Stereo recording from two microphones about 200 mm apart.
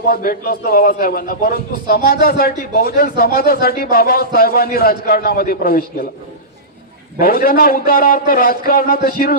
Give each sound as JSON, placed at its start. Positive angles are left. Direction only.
{"t": 0.0, "sound": "a man's voice", "side_deg": 45}
{"t": 7.2, "sound": "a man's voice", "side_deg": 45}